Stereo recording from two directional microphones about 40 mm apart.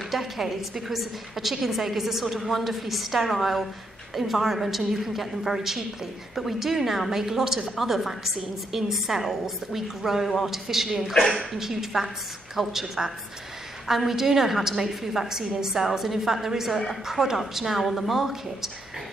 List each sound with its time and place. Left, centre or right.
0.1 s a woman's voice: centre